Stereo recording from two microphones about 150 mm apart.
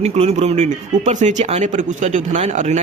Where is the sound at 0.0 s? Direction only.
45° right (ahead or behind).